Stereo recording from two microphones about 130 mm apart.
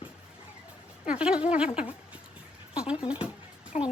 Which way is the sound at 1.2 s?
10° right (ahead or behind).